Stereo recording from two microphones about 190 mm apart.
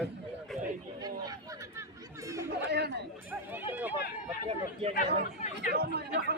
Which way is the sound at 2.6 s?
60° right (ahead or behind).